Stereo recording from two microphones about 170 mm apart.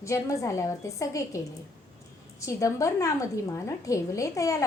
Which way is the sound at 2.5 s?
20° left (ahead or behind).